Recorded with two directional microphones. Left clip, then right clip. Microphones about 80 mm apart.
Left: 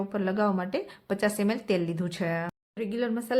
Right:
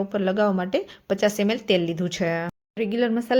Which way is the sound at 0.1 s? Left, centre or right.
Right.